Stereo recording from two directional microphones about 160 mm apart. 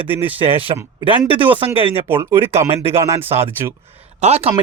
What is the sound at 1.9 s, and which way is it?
Speech, 15° right (ahead or behind).